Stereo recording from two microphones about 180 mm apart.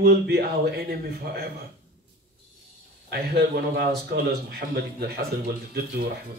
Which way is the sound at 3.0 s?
60° right (ahead or behind).